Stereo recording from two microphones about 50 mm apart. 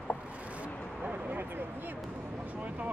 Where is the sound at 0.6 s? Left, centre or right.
Right.